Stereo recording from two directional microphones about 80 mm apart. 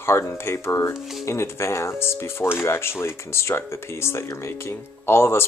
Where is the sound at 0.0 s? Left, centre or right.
Left.